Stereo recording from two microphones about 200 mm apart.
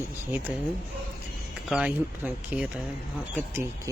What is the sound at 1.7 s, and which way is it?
Speech, 5° right (ahead or behind).